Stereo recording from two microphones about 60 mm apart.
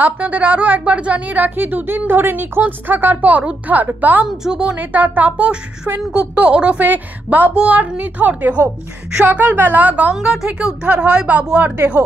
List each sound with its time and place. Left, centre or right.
0.0 s a woman's voice: right
4.3 s speech: centre
4.7 s a woman's voice: right
6.8 s a woman's voice: right
10.2 s a woman's voice: centre
11.7 s a woman's voice: right